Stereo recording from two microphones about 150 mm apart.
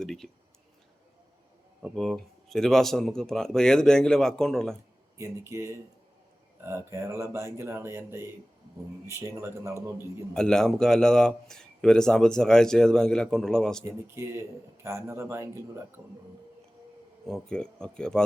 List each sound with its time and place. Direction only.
0.0 s speech: centre (ahead or behind)
1.8 s speech: centre (ahead or behind)
5.1 s speech: 20° right (ahead or behind)
10.3 s speech: 5° left (ahead or behind)
14.2 s speech: 20° right (ahead or behind)
17.2 s speech: 5° left (ahead or behind)